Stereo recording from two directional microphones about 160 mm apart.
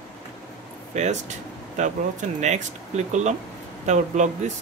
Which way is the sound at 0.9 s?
45° right (ahead or behind).